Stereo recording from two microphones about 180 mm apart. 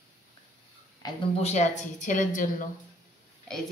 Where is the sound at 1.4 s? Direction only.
40° left (ahead or behind).